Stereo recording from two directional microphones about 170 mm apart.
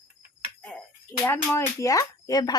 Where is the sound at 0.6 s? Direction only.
5° left (ahead or behind); by 2.5 s 20° left (ahead or behind).